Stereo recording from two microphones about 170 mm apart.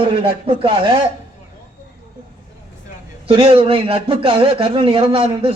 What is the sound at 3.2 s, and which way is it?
A man's voice, 30° right (ahead or behind).